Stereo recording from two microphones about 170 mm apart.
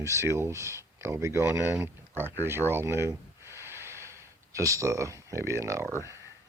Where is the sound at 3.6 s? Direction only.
15° right (ahead or behind).